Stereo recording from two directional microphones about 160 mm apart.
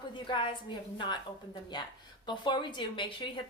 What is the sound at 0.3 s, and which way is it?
Speech, 30° left (ahead or behind).